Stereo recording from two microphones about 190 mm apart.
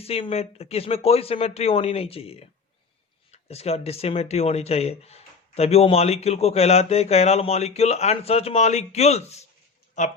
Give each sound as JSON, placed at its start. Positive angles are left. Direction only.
{"t": 0.0, "sound": "speech", "side_deg": 30}